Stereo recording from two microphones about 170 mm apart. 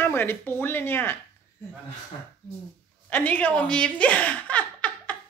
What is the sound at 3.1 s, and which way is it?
Speech, 10° left (ahead or behind).